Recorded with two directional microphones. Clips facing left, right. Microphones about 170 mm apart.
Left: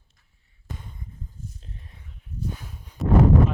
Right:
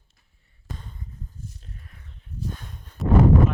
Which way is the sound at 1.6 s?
25° left (ahead or behind).